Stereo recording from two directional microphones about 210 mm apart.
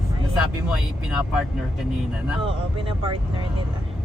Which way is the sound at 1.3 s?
5° right (ahead or behind).